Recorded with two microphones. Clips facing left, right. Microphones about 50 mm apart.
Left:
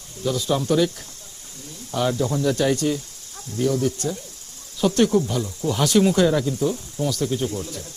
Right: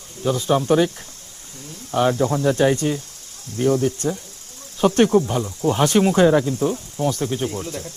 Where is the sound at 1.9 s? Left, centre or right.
Right.